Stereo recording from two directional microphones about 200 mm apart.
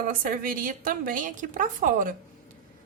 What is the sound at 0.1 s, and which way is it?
A woman's voice, 45° right (ahead or behind).